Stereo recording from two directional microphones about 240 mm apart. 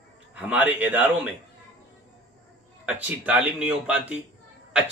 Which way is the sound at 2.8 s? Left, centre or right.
Centre.